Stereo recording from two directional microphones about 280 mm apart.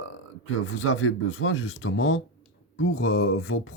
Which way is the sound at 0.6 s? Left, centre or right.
Left.